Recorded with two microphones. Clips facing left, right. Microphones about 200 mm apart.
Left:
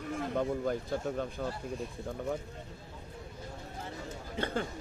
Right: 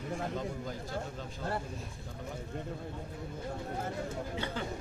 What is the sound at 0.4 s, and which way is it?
Speech, 60° left (ahead or behind).